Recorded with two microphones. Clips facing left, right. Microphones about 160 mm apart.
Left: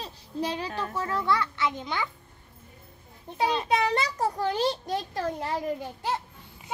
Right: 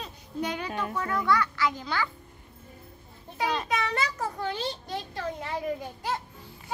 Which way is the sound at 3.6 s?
30° left (ahead or behind).